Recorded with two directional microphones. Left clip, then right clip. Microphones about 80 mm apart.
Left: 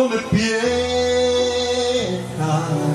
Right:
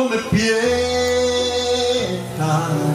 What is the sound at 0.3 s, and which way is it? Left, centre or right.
Music, left.